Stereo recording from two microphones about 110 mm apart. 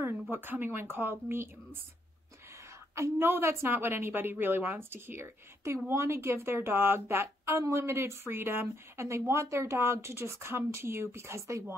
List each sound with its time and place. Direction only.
0.0 s speech: 20° right (ahead or behind)
3.0 s a woman's voice: 20° right (ahead or behind)